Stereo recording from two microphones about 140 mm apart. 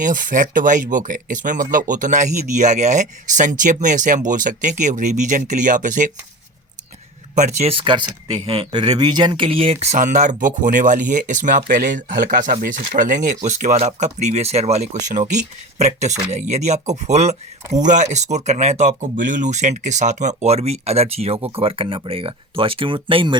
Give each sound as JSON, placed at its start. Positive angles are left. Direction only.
{"t": 0.0, "sound": "speech", "side_deg": -75}
{"t": 7.3, "sound": "speech", "side_deg": -60}
{"t": 7.7, "sound": "speech", "side_deg": -35}
{"t": 9.9, "sound": "speech", "side_deg": -65}